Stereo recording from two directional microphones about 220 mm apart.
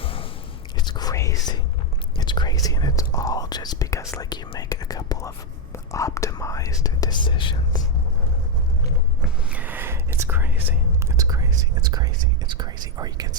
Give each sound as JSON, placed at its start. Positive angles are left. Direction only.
{"t": 0.0, "sound": "a sound", "side_deg": 25}
{"t": 0.8, "sound": "whispering", "side_deg": 20}
{"t": 2.1, "sound": "speech", "side_deg": 20}
{"t": 9.2, "sound": "speech", "side_deg": -5}